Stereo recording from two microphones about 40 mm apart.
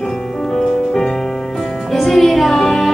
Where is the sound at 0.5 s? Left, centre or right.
Centre.